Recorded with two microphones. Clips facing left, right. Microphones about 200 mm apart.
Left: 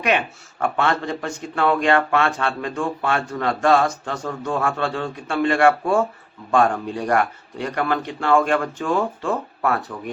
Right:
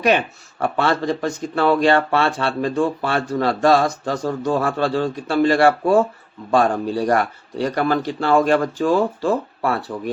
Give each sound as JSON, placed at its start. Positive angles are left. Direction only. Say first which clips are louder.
{"t": 0.6, "sound": "speech", "louder": "right 2 dB", "side_deg": -35}